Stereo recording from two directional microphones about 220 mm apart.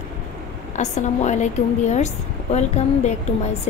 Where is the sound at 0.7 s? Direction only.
30° left (ahead or behind).